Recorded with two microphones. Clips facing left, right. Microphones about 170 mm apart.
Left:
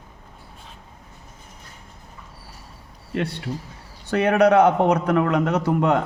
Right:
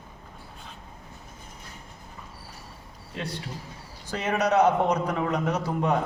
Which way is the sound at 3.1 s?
65° left (ahead or behind).